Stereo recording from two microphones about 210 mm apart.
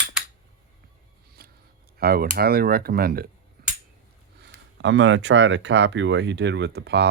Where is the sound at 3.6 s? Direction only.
45° right (ahead or behind).